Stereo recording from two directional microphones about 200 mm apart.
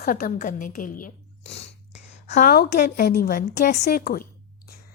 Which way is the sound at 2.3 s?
45° left (ahead or behind).